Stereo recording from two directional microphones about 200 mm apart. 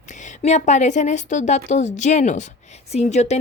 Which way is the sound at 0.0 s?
35° left (ahead or behind).